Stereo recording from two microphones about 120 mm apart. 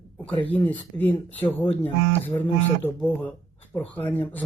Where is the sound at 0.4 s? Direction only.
15° left (ahead or behind).